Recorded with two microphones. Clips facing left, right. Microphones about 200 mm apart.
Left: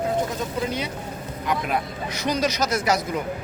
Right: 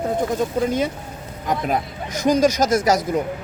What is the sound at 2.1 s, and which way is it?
Speech, 45° right (ahead or behind).